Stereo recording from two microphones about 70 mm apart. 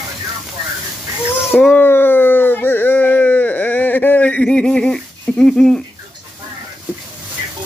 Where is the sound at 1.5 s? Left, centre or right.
Left.